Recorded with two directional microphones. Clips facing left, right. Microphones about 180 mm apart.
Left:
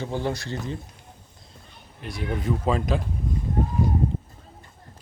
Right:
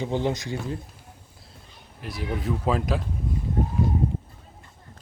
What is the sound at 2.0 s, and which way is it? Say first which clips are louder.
Speech: left 1 dB; centre (ahead or behind).